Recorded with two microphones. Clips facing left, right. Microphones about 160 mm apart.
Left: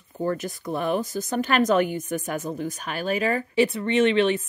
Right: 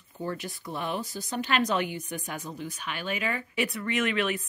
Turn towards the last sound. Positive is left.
turn(degrees=30)  # may be behind; listen again after turning